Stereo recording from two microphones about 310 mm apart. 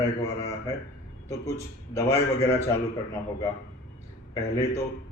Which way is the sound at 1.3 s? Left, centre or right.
Centre.